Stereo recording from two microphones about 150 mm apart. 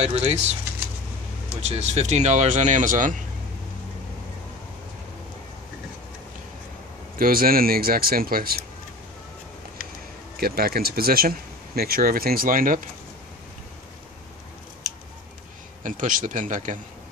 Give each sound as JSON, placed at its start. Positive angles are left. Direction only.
{"t": 0.0, "sound": "speech", "side_deg": -45}
{"t": 1.6, "sound": "speech", "side_deg": -45}
{"t": 7.2, "sound": "speech", "side_deg": -75}
{"t": 10.3, "sound": "speech", "side_deg": -85}
{"t": 15.8, "sound": "a man's voice", "side_deg": -60}